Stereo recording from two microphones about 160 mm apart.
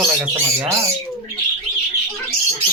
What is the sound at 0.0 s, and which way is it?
Speech, 15° right (ahead or behind).